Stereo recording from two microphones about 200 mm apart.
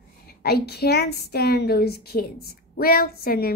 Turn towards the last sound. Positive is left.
turn(degrees=50)  # may be behind; listen again after turning